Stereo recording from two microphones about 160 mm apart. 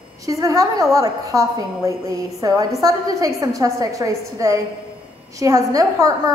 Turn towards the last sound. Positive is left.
turn(degrees=-20)  # may be behind; listen again after turning